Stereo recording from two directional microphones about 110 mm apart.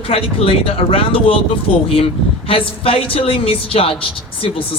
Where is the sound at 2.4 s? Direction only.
60° left (ahead or behind).